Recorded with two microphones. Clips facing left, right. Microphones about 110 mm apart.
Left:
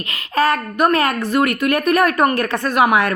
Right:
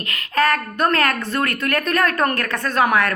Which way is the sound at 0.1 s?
20° left (ahead or behind).